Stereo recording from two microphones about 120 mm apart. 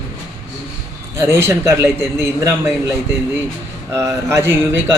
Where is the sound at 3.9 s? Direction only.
25° right (ahead or behind).